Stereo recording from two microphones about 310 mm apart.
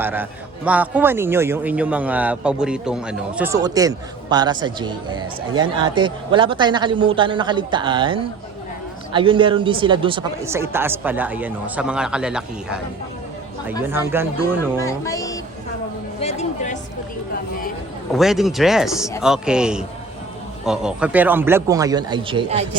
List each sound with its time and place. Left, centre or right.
0.0 s a man's voice: centre
13.8 s a man's voice: centre
14.8 s speech: centre
16.2 s a woman's voice: left
18.1 s a man's voice: centre